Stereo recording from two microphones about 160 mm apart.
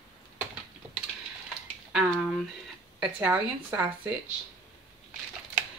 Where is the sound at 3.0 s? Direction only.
10° right (ahead or behind).